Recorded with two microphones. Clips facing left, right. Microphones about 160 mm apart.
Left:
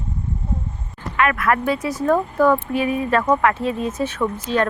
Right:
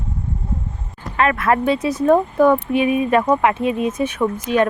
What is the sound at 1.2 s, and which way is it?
Speech, 30° right (ahead or behind).